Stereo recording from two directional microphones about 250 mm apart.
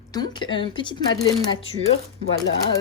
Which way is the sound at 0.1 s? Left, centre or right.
Centre.